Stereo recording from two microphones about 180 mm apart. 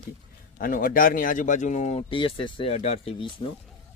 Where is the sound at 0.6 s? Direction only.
50° left (ahead or behind).